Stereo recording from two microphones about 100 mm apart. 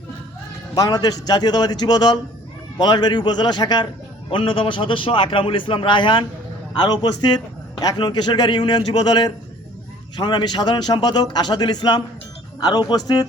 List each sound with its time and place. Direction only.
0.8 s a man's voice: 40° left (ahead or behind)
4.3 s a man's voice: 60° left (ahead or behind)
6.7 s a man's voice: 45° left (ahead or behind)